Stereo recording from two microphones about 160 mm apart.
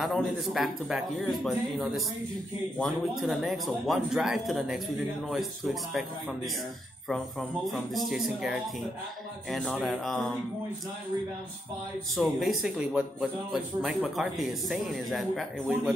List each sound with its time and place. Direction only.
0.0 s a man's voice: centre (ahead or behind)
12.2 s a man's voice: centre (ahead or behind)